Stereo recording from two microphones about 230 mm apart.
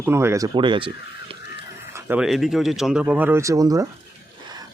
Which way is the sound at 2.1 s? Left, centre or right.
Centre.